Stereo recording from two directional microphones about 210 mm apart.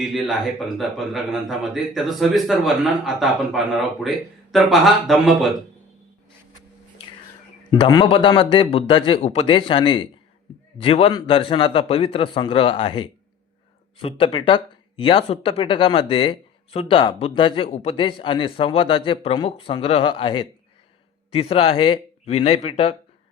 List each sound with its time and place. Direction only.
0.1 s a man's voice: centre (ahead or behind)
7.7 s speech: 20° left (ahead or behind)